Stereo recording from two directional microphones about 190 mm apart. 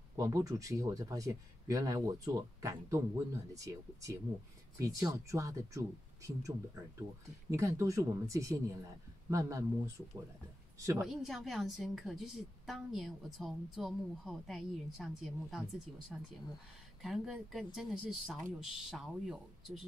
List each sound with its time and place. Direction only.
0.1 s speech: 15° right (ahead or behind)
11.1 s a woman's voice: centre (ahead or behind)